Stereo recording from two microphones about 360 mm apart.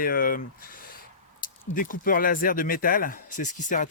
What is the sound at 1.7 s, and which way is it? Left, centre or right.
Speech, left.